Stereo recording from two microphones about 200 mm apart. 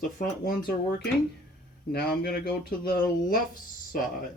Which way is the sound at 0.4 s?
50° left (ahead or behind).